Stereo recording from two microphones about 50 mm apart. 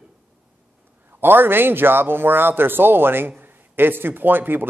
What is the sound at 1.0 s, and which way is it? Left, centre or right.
Speech, right.